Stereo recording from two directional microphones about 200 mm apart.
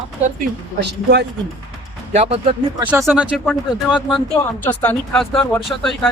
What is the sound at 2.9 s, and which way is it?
Speech, 10° right (ahead or behind).